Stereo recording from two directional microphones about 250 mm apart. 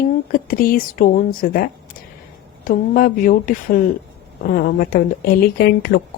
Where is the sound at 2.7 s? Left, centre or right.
Left.